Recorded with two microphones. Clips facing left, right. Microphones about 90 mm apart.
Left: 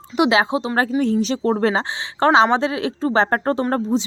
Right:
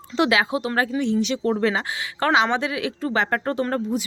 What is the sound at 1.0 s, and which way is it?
A woman's voice, 40° left (ahead or behind).